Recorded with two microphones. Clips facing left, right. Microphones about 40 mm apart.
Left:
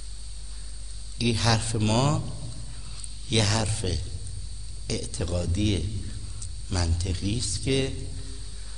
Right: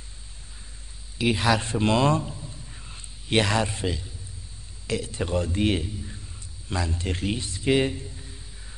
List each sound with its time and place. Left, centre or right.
1.1 s a man's voice: right
2.3 s a sound: right
4.8 s a man's voice: right